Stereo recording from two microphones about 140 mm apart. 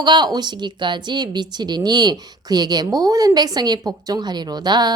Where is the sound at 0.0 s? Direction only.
30° right (ahead or behind).